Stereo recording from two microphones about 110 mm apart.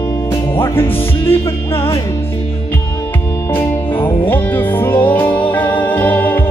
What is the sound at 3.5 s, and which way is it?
Music, 20° left (ahead or behind).